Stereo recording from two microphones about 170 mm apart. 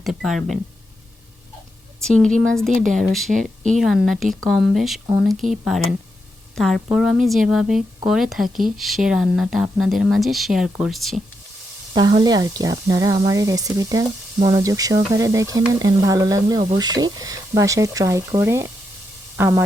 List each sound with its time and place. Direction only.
0.0 s speech: centre (ahead or behind)
2.0 s speech: 5° left (ahead or behind)
11.9 s speech: 25° right (ahead or behind)